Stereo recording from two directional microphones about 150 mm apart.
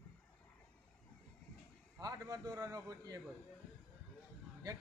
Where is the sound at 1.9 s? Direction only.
25° right (ahead or behind).